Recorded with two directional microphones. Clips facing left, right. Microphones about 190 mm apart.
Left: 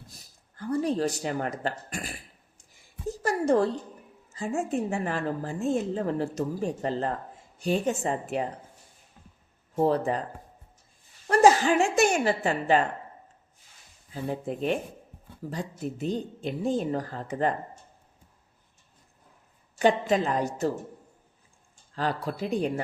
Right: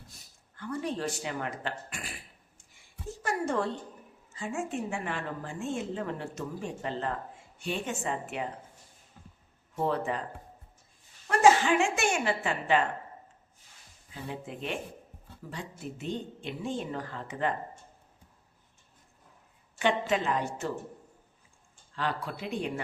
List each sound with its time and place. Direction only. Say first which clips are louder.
0.1 s a sound: left 3 dB; 35° left (ahead or behind)
3.2 s a woman's voice: left 7 dB; 35° left (ahead or behind)
9.7 s a woman's voice: left 6 dB; 35° left (ahead or behind)
11.3 s a woman's voice: left 3 dB; 40° left (ahead or behind)
14.1 s a woman's voice: left 8 dB; 40° left (ahead or behind)
19.8 s a woman's voice: left 5 dB; 35° left (ahead or behind)
21.9 s a woman's voice: left 4 dB; 40° left (ahead or behind)